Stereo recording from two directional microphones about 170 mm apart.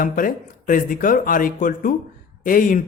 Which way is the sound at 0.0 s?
55° left (ahead or behind).